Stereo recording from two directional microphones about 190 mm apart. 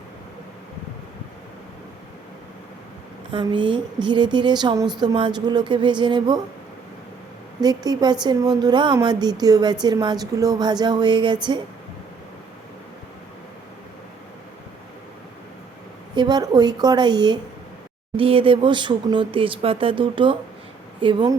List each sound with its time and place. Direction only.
3.3 s speech: 25° right (ahead or behind)
7.6 s speech: 20° right (ahead or behind)
16.1 s speech: 20° right (ahead or behind)